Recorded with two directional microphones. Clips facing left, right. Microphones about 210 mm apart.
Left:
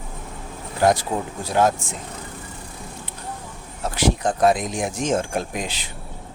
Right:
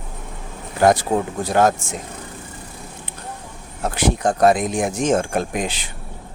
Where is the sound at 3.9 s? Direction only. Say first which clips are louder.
Right 2 dB; 50° right (ahead or behind).